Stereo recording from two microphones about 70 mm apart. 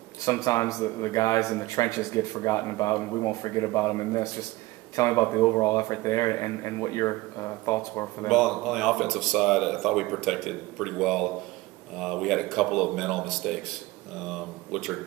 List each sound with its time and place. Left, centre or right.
0.2 s speech: left
8.3 s speech: centre